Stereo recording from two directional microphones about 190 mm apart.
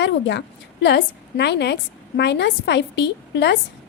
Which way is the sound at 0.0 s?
70° left (ahead or behind).